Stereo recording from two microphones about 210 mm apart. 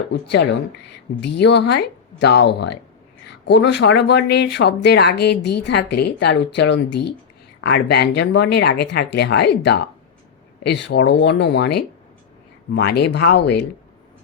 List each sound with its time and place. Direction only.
0.1 s speech: 55° left (ahead or behind)